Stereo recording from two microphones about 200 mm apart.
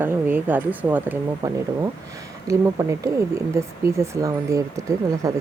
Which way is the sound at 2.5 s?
15° right (ahead or behind).